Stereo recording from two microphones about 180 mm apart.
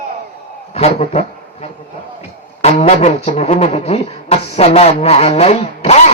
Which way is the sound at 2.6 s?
35° left (ahead or behind).